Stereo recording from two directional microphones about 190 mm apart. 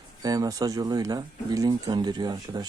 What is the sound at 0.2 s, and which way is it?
Speech, 20° right (ahead or behind).